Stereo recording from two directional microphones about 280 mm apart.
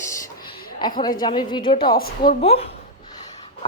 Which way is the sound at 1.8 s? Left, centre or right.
Left.